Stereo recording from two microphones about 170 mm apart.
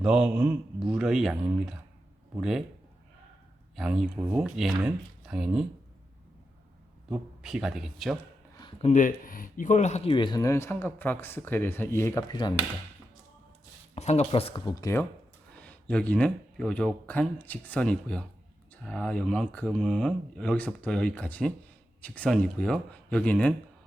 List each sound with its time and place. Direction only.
0.0 s speech: 5° right (ahead or behind)
3.8 s speech: centre (ahead or behind)
7.1 s speech: 5° right (ahead or behind)
8.8 s speech: 45° left (ahead or behind); by 12.5 s 25° left (ahead or behind)
13.9 s speech: 40° left (ahead or behind)
14.6 s speech: 15° left (ahead or behind)
15.6 s speech: 5° left (ahead or behind)